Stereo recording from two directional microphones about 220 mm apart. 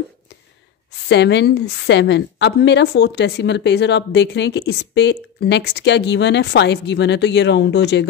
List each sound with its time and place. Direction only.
1.0 s a woman's voice: 50° left (ahead or behind)